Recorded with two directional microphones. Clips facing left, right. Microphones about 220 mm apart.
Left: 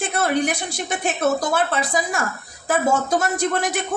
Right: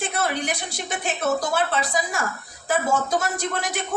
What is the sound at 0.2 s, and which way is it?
A woman's voice, 50° left (ahead or behind).